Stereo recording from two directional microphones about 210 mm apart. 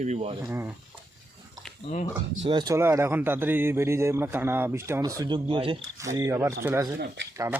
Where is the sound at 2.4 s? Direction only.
20° right (ahead or behind).